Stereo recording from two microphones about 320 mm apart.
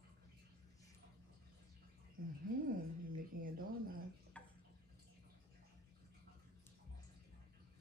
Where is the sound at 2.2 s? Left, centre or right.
Right.